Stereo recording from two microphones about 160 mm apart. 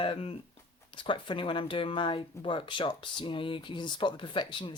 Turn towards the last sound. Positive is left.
turn(degrees=30)  # may be behind; listen again after turning